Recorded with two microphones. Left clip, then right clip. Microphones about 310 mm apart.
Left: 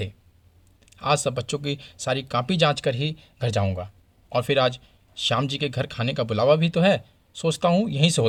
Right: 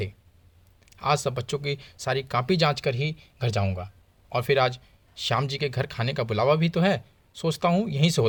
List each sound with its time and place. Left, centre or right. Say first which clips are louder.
0.9 s speech: left 2 dB; right